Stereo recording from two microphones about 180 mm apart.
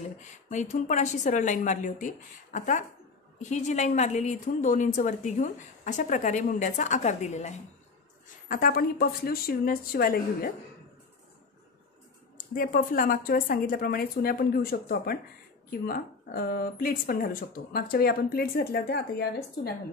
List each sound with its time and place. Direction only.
0.5 s a woman's voice: 40° left (ahead or behind)
8.5 s speech: 55° left (ahead or behind)
12.5 s a woman's voice: 50° left (ahead or behind)